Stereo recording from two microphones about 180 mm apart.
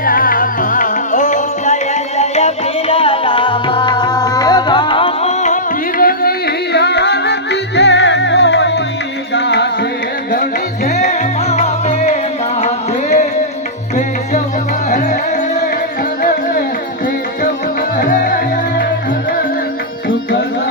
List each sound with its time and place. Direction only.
0.0 s music: 50° left (ahead or behind)
6.0 s music: 55° left (ahead or behind)
6.7 s music: 65° left (ahead or behind)
10.8 s music: 40° left (ahead or behind)
14.8 s music: 45° left (ahead or behind)
18.0 s music: 50° left (ahead or behind)